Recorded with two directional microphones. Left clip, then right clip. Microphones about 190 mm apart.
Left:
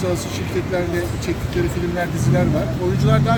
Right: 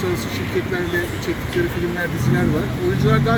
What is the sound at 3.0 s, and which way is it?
Speech, 65° left (ahead or behind).